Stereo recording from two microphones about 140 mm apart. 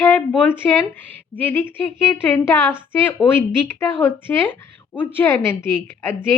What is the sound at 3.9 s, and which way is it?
A woman's voice, 15° left (ahead or behind).